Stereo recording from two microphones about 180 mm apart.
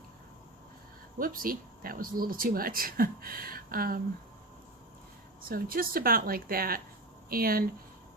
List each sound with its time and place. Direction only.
1.2 s speech: 50° right (ahead or behind)
5.5 s speech: 55° right (ahead or behind)